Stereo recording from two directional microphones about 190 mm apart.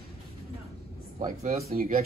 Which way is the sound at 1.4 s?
45° right (ahead or behind).